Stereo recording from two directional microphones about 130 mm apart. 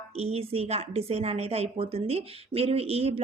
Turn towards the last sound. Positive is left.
turn(degrees=-50)  # may be behind; listen again after turning